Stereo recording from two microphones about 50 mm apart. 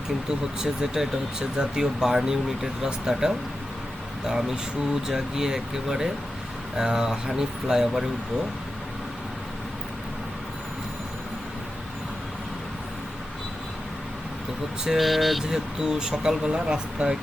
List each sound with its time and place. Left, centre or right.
0.3 s speech: centre
14.8 s speech: centre
15.4 s speech: centre